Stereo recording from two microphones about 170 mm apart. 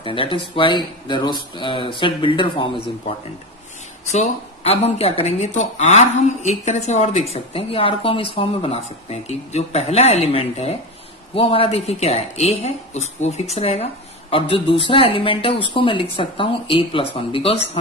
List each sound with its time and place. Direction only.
0.0 s speech: 30° left (ahead or behind)
4.1 s speech: 40° left (ahead or behind)